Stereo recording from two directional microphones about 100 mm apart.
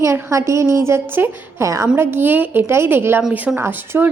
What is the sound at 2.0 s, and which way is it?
A woman's voice, 20° right (ahead or behind).